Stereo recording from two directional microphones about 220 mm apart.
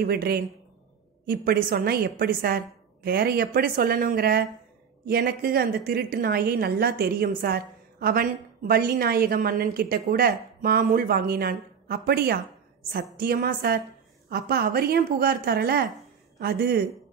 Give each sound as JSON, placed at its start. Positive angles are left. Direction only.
{"t": 0.0, "sound": "a woman's voice", "side_deg": -45}